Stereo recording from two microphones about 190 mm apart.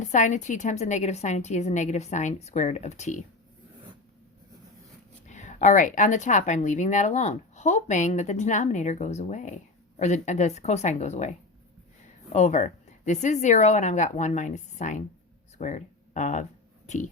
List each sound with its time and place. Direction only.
0.0 s a woman's voice: 40° left (ahead or behind)
5.2 s a woman's voice: 40° left (ahead or behind)
15.5 s a sound: 40° left (ahead or behind)